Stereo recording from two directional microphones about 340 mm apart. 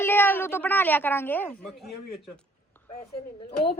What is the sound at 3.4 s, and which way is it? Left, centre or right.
Speech, left.